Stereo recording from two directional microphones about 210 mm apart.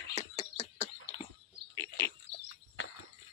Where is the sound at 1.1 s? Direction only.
30° left (ahead or behind).